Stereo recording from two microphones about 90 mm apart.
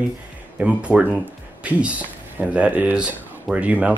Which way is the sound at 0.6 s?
15° right (ahead or behind).